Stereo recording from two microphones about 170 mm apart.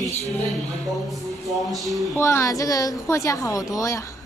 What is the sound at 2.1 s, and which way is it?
A woman's voice, 15° left (ahead or behind).